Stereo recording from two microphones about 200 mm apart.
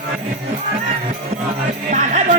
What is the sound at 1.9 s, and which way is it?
Music, 40° right (ahead or behind).